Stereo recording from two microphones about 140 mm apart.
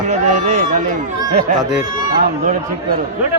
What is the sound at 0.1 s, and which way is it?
Speech, 60° right (ahead or behind).